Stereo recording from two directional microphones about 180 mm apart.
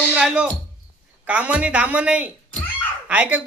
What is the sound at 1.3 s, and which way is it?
Speech, 5° right (ahead or behind).